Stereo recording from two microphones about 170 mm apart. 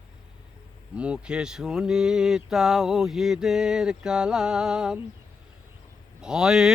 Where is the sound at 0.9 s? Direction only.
5° right (ahead or behind).